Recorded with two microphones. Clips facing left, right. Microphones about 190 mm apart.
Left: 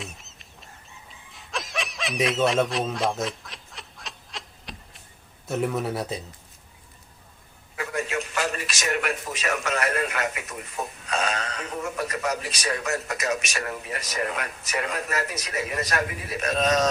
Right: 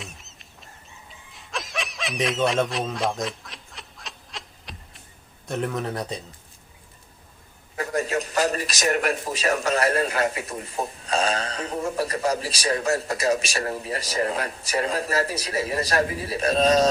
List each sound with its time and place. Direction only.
0.0 s fowl: centre (ahead or behind)
5.5 s speech: 5° left (ahead or behind)
7.8 s a man's voice: 35° right (ahead or behind)